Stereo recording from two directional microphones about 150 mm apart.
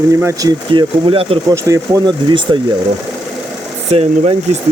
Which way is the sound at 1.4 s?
20° right (ahead or behind).